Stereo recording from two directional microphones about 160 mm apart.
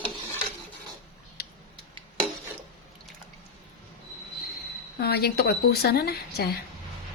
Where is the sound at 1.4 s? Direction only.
75° left (ahead or behind).